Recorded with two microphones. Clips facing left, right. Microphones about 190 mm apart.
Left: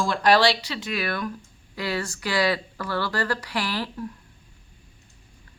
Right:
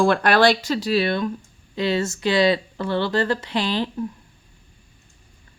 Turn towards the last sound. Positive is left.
turn(degrees=-20)  # may be behind; listen again after turning